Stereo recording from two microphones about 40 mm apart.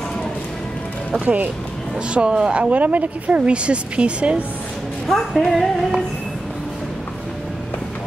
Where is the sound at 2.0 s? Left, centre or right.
Right.